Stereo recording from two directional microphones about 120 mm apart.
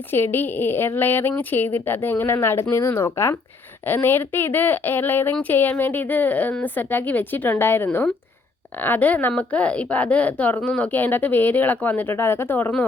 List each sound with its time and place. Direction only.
0.1 s a woman's voice: 20° left (ahead or behind)